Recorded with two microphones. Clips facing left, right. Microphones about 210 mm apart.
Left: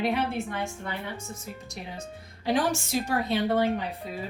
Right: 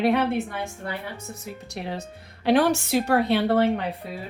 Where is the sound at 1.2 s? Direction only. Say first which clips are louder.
Right 2 dB; 65° right (ahead or behind).